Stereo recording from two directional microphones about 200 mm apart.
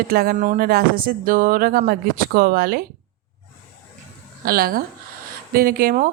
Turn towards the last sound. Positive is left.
turn(degrees=-45)  # may be behind; listen again after turning